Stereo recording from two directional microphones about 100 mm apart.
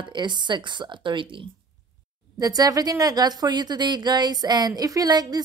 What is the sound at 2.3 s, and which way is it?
A woman's voice, 40° right (ahead or behind).